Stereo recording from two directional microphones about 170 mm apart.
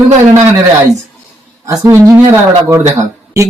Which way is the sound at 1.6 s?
20° right (ahead or behind).